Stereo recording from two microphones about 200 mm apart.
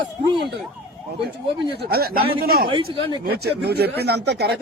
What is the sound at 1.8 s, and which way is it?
Speech, 50° right (ahead or behind).